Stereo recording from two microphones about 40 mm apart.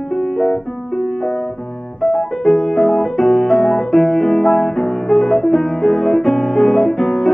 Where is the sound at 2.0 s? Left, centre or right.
Centre.